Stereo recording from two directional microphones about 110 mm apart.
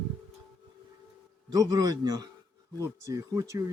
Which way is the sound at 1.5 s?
35° right (ahead or behind).